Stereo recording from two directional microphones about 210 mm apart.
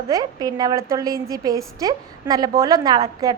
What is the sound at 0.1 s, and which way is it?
A woman's voice, 15° right (ahead or behind).